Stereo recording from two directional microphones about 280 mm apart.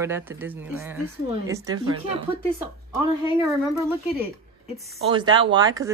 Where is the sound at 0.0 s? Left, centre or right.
Centre.